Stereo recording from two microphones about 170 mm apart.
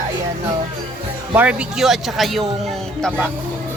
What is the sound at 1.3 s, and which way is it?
Speech, 5° right (ahead or behind).